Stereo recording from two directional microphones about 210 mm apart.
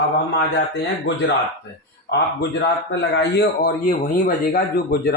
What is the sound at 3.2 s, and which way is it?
A man's voice, 50° left (ahead or behind).